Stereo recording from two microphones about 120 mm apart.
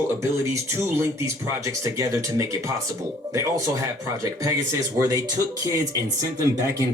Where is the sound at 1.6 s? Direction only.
25° right (ahead or behind).